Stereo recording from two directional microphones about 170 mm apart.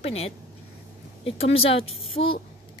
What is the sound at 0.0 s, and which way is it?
Speech, 35° left (ahead or behind).